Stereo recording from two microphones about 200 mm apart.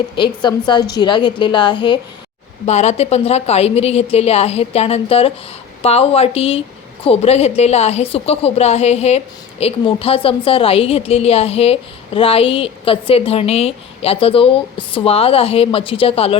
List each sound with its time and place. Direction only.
0.2 s a woman's voice: 25° left (ahead or behind)
2.6 s a woman's voice: 35° left (ahead or behind)